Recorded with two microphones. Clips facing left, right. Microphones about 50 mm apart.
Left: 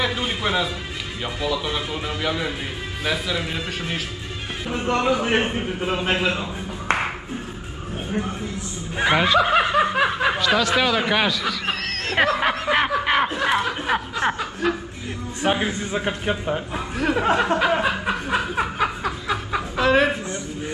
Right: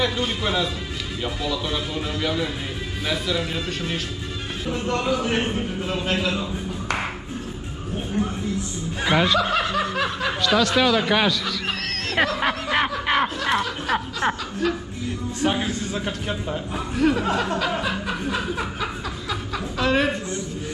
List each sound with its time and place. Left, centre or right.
0.0 s speech: centre
4.6 s a man's voice: left
8.2 s a man's voice: left
10.4 s a man's voice: centre; by 16.8 s left
17.1 s chuckle: left
19.8 s speech: centre